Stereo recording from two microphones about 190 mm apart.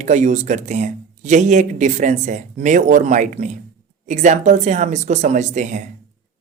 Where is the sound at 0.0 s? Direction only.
40° right (ahead or behind).